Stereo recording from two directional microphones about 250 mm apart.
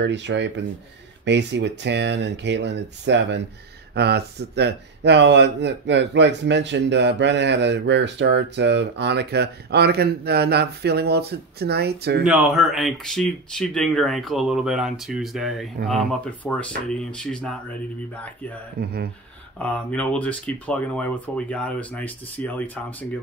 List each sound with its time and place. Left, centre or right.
0.0 s speech: right
12.3 s speech: centre
18.8 s speech: right
19.6 s speech: centre